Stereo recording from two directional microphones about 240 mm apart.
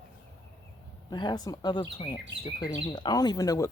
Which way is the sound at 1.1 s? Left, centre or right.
Centre.